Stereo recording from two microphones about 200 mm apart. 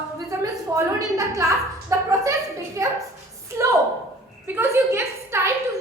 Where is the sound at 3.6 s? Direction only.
15° right (ahead or behind).